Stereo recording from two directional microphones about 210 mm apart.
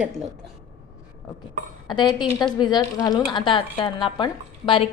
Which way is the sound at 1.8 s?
20° left (ahead or behind).